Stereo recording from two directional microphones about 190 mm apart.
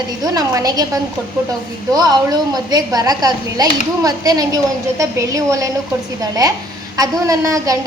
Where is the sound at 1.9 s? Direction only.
20° right (ahead or behind).